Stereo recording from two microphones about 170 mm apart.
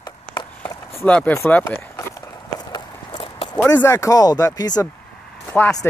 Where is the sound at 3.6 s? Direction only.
15° left (ahead or behind).